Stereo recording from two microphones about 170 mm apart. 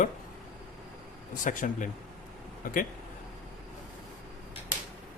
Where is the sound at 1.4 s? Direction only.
50° left (ahead or behind).